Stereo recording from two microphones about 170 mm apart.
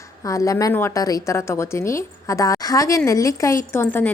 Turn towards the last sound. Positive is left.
turn(degrees=15)  # may be behind; listen again after turning